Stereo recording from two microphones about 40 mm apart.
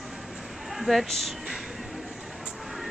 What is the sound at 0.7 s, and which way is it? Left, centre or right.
Speech, centre.